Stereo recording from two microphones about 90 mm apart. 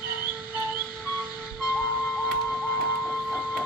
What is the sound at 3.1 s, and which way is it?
Printer, 10° right (ahead or behind).